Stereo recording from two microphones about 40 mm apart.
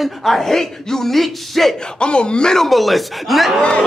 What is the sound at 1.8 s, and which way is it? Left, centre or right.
Speech, left.